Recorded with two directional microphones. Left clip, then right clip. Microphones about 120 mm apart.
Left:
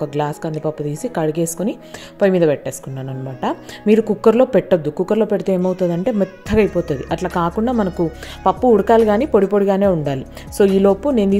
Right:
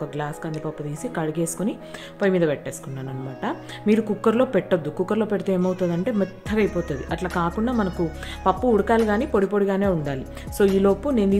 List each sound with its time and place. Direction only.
0.0 s a woman's voice: 45° left (ahead or behind)